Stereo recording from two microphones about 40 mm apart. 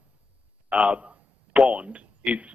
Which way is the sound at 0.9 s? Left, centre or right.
Right.